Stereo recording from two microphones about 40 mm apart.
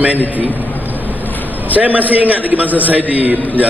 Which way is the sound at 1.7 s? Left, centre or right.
Right.